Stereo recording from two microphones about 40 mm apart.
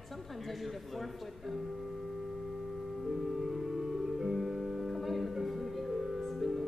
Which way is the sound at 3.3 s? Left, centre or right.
Centre.